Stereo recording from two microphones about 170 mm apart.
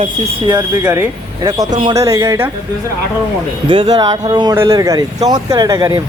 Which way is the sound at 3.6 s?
30° right (ahead or behind).